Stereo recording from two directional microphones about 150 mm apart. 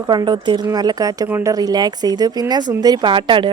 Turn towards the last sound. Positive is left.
turn(degrees=-35)  # may be behind; listen again after turning